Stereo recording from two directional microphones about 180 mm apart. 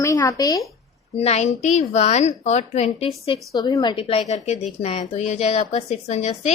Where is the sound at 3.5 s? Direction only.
25° left (ahead or behind).